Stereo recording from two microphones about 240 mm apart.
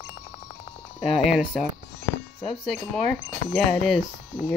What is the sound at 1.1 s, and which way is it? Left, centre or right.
Speech, centre.